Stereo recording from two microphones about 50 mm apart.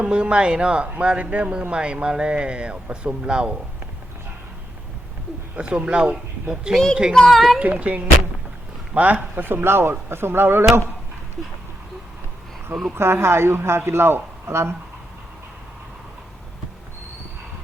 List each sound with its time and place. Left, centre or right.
0.0 s speech: right
5.5 s speech: right
7.1 s speech: centre
7.6 s speech: right
13.0 s speech: right